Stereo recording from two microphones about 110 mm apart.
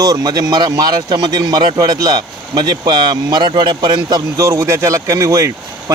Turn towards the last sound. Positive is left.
turn(degrees=-30)  # may be behind; listen again after turning